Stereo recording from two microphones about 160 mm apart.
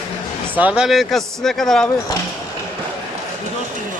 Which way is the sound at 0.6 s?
10° right (ahead or behind).